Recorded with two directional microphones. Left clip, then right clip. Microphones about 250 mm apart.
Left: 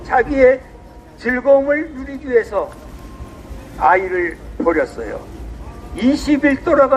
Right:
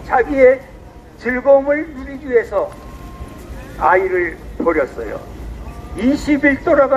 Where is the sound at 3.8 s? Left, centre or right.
Left.